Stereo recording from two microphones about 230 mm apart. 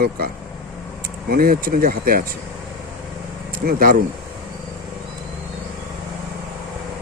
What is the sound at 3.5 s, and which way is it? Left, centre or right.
Speech, right.